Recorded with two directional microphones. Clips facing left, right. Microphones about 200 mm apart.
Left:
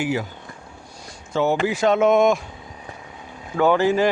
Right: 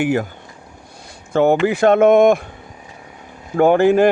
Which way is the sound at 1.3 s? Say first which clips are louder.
Right 6 dB; 55° right (ahead or behind).